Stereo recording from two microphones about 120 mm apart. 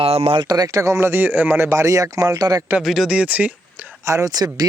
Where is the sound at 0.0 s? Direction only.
55° right (ahead or behind).